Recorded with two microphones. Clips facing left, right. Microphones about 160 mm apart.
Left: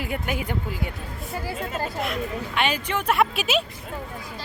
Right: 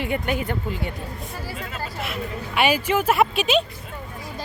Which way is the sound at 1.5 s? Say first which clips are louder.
Left 4 dB; 40° left (ahead or behind).